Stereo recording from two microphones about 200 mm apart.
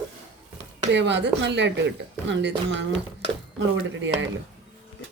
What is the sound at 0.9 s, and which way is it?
Speech, 60° right (ahead or behind).